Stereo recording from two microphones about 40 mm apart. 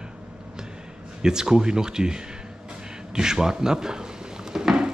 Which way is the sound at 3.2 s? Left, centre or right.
Centre.